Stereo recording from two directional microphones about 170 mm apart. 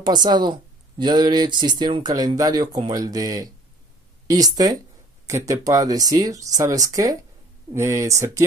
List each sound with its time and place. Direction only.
0.0 s a woman's voice: 25° right (ahead or behind)